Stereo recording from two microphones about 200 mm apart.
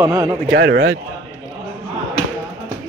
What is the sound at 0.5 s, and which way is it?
Speech, 60° right (ahead or behind).